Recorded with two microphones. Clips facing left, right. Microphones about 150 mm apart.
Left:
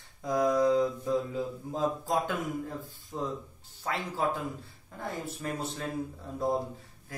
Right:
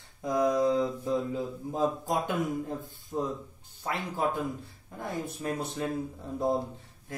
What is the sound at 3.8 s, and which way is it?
Mantra, 20° right (ahead or behind).